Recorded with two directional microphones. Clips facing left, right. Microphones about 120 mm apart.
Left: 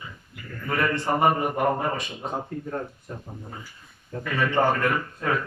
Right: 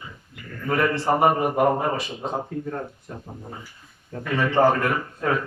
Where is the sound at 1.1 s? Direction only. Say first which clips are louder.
Right 3 dB; 15° right (ahead or behind).